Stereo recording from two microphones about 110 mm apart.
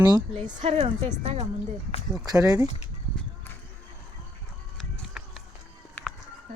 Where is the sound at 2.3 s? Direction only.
35° right (ahead or behind).